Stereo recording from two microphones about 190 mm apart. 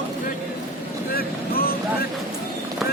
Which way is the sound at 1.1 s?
50° left (ahead or behind).